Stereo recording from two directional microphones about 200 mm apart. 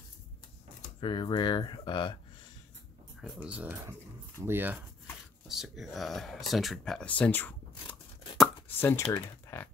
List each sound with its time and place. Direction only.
1.0 s speech: 25° left (ahead or behind)
3.2 s speech: 5° right (ahead or behind); by 8.0 s 10° left (ahead or behind)
8.4 s chopping: 10° left (ahead or behind)
9.5 s a sound: 10° left (ahead or behind)